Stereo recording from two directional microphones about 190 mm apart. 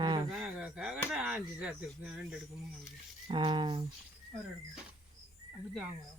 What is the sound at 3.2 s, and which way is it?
Speech, 25° right (ahead or behind).